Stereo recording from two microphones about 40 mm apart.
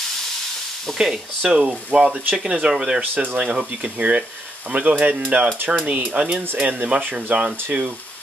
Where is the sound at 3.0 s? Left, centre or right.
Right.